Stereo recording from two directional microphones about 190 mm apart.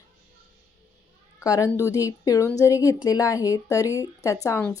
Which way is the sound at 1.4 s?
15° left (ahead or behind).